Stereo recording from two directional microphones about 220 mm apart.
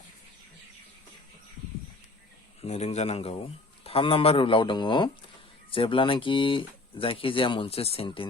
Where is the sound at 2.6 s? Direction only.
30° left (ahead or behind).